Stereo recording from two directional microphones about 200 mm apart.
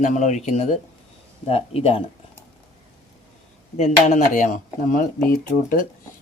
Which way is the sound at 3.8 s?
35° left (ahead or behind).